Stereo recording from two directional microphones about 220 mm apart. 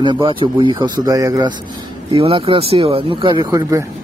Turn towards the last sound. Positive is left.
turn(degrees=-15)  # may be behind; listen again after turning